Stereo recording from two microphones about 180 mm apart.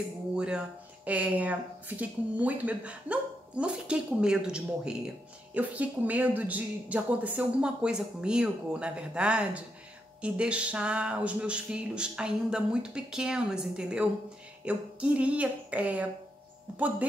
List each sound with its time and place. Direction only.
0.4 s speech: 5° right (ahead or behind)